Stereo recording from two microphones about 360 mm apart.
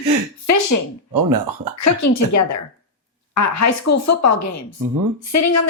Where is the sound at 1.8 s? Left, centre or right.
Left.